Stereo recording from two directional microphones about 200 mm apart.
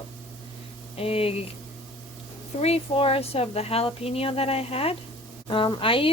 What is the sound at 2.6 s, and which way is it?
Speech, 30° left (ahead or behind).